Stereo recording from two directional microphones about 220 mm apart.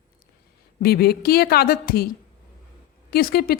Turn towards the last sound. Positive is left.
turn(degrees=45)  # may be behind; listen again after turning